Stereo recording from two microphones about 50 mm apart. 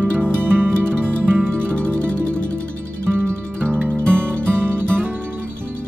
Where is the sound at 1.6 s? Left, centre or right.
Left.